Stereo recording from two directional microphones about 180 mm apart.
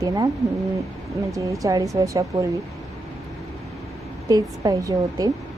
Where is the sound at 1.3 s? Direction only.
15° right (ahead or behind).